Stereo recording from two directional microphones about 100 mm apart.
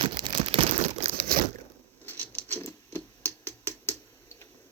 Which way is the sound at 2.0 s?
20° left (ahead or behind).